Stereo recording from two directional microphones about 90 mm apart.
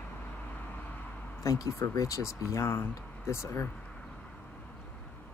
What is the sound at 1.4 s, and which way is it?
Speech, 40° left (ahead or behind).